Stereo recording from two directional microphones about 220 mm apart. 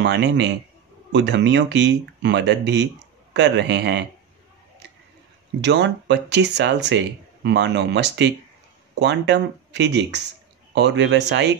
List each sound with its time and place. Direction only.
0.0 s speech: 50° right (ahead or behind)
5.6 s speech: 50° right (ahead or behind)